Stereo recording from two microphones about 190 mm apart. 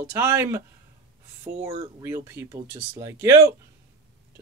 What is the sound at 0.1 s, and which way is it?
Speech, 15° right (ahead or behind).